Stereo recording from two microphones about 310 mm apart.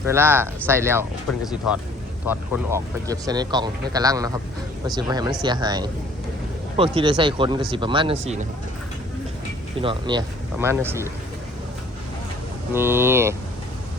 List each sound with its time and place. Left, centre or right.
0.1 s speech: centre
2.2 s speech: centre
9.8 s speech: centre
12.7 s speech: centre